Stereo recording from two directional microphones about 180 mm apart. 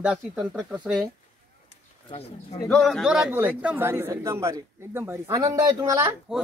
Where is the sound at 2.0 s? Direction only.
35° left (ahead or behind).